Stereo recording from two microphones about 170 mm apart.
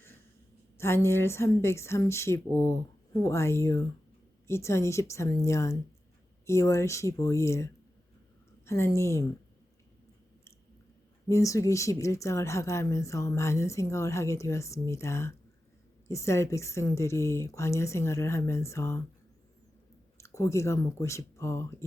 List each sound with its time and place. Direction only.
0.8 s speech: 15° left (ahead or behind)
11.3 s speech: 20° left (ahead or behind)
20.1 s speech: 15° left (ahead or behind)